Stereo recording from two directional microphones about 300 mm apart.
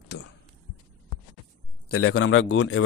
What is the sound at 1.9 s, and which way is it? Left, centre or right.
Speech, left.